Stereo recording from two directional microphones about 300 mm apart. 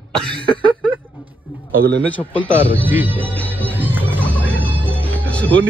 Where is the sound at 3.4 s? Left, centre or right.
Centre.